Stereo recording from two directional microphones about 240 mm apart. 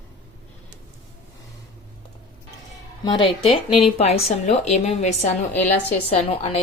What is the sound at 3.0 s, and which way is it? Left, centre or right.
Speech, left.